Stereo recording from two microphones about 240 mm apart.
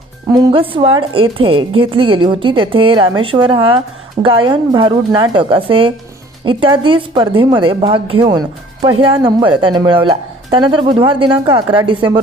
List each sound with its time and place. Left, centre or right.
0.3 s a woman's voice: centre